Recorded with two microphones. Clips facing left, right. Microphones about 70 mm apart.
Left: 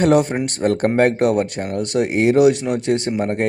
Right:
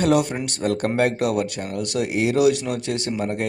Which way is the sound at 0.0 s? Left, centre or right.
Left.